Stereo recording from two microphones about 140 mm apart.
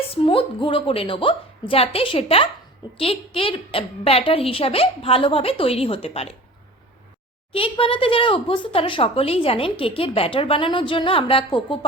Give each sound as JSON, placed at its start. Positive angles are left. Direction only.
{"t": 0.1, "sound": "a woman's voice", "side_deg": 40}
{"t": 7.5, "sound": "a woman's voice", "side_deg": 40}